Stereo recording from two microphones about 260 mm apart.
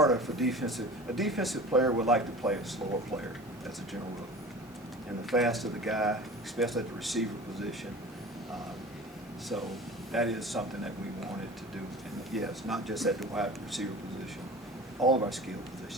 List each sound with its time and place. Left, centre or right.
0.0 s speech: centre
5.3 s speech: centre
10.1 s speech: centre
12.3 s speech: centre
15.0 s speech: centre